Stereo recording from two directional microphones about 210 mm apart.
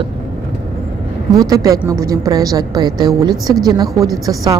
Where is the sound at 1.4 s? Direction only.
15° right (ahead or behind).